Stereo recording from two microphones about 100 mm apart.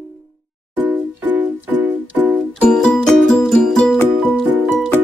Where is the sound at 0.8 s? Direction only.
15° right (ahead or behind).